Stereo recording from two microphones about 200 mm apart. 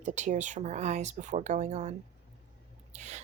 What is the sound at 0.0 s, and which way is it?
Speech, 35° right (ahead or behind).